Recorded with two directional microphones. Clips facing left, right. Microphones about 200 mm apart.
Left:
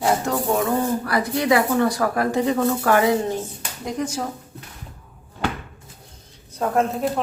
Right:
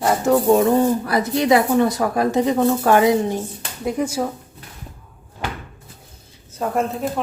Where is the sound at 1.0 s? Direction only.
20° right (ahead or behind).